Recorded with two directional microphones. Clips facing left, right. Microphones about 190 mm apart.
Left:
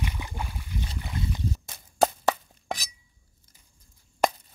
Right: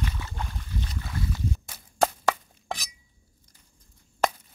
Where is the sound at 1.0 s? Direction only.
20° left (ahead or behind).